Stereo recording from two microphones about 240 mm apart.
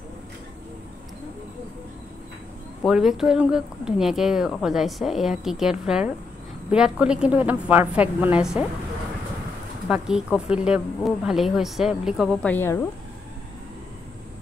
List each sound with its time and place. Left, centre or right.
2.8 s speech: centre
9.8 s speech: centre